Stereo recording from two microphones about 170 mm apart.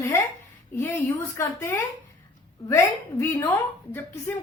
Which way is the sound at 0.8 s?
15° left (ahead or behind).